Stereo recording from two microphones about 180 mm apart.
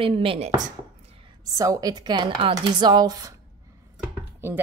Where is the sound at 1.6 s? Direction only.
20° right (ahead or behind).